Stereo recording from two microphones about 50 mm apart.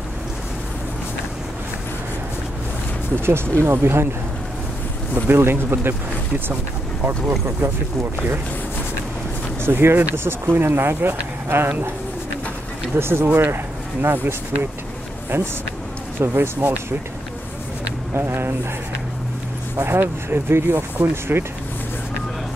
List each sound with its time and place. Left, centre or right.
3.6 s speech: right
5.3 s speech: right
7.1 s speech: right
9.6 s speech: right
12.9 s speech: right
18.1 s speech: right
19.9 s speech: right